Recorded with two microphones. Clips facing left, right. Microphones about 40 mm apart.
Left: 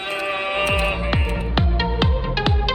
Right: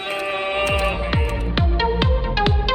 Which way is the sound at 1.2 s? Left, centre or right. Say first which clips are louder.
Even; centre.